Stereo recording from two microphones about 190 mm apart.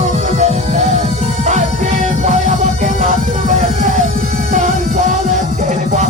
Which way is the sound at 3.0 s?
40° right (ahead or behind).